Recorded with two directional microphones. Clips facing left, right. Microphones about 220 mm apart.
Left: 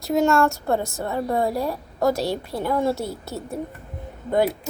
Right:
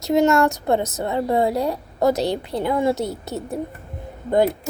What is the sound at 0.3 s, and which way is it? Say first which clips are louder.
A woman's voice: right 2 dB; 20° right (ahead or behind).